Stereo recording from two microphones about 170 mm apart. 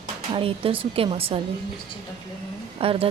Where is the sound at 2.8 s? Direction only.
35° right (ahead or behind).